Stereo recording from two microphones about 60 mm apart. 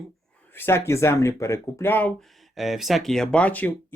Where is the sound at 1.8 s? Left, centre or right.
Left.